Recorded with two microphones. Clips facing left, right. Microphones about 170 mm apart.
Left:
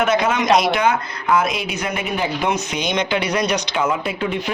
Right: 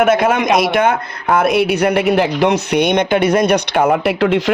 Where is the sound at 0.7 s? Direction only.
55° right (ahead or behind).